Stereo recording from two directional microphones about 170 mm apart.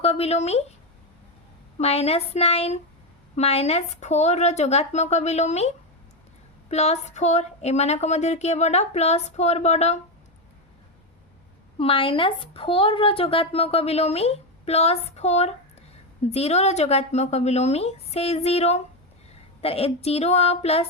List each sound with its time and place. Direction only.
0.0 s speech: 35° left (ahead or behind)
1.8 s speech: 35° left (ahead or behind)
11.8 s speech: 30° left (ahead or behind)